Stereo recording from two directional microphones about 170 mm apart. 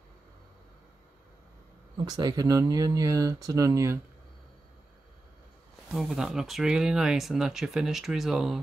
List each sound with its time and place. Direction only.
2.0 s speech: 25° right (ahead or behind)
5.9 s speech: centre (ahead or behind)